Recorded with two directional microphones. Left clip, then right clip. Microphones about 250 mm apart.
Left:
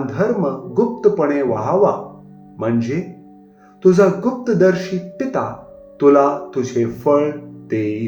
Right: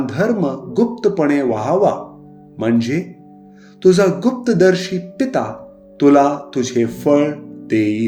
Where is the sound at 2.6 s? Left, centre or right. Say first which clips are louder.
Right 2 dB; right.